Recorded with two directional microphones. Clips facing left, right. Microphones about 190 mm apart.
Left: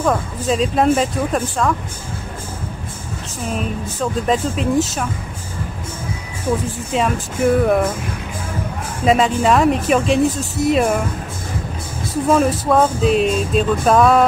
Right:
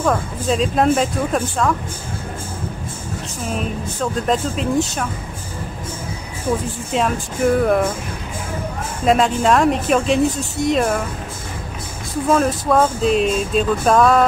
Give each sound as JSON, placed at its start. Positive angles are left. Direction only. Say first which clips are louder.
{"t": 0.0, "sound": "speech", "louder": "left 1 dB", "side_deg": 0}
{"t": 3.5, "sound": "speech", "louder": "left 1 dB", "side_deg": 0}
{"t": 6.9, "sound": "speech", "louder": "even", "side_deg": 0}
{"t": 9.0, "sound": "speech", "louder": "left 1 dB", "side_deg": 0}
{"t": 12.3, "sound": "speech", "louder": "left 1 dB", "side_deg": 0}